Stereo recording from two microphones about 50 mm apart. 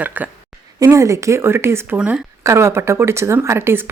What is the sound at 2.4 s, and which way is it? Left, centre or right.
A woman's voice, right.